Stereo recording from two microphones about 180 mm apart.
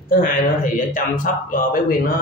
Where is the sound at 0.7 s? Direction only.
50° left (ahead or behind).